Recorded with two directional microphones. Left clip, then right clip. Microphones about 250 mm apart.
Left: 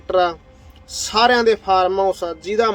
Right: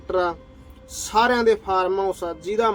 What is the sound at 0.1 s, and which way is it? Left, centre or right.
A man's voice, centre.